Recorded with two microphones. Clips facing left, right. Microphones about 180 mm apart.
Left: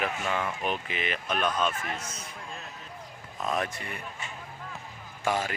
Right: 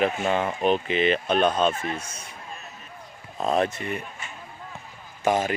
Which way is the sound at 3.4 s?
30° right (ahead or behind).